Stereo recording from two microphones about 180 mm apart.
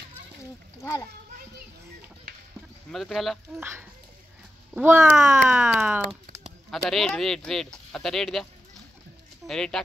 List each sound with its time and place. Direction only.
2.9 s speech: centre (ahead or behind)
3.5 s speech: 15° right (ahead or behind)
6.7 s speech: centre (ahead or behind)
9.5 s speech: 5° left (ahead or behind)